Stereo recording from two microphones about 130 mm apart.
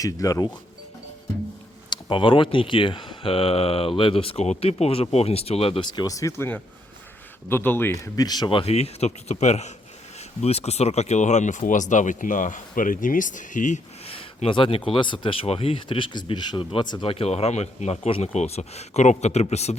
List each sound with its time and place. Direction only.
0.0 s speech: 25° left (ahead or behind)
1.9 s speech: 40° left (ahead or behind)
5.9 s speech: 30° left (ahead or behind)
8.0 s speech: 30° left (ahead or behind); by 13.8 s 75° left (ahead or behind)
14.0 s a sound: 45° left (ahead or behind)
14.8 s speech: 40° left (ahead or behind); by 19.7 s 55° left (ahead or behind)